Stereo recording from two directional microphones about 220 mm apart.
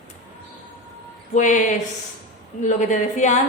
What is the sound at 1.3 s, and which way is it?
Speech, 35° left (ahead or behind).